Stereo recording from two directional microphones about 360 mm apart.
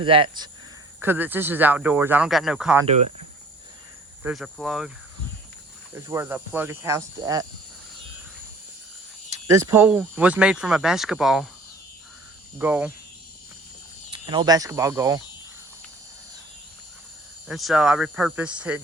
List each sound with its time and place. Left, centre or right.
0.0 s speech: centre
2.8 s speech: centre
4.2 s speech: centre
5.9 s speech: centre
9.5 s speech: centre
12.5 s speech: centre
14.1 s speech: centre
17.5 s speech: centre